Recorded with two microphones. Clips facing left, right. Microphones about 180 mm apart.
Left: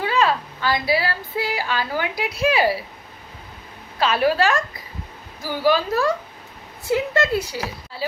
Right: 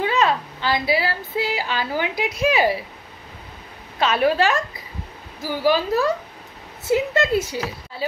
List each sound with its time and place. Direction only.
0.0 s speech: 20° right (ahead or behind)
4.0 s speech: 20° right (ahead or behind)